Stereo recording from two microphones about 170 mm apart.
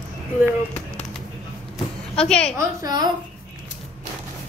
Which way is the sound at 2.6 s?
20° right (ahead or behind).